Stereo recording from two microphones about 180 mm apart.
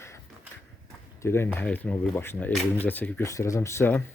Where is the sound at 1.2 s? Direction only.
15° left (ahead or behind).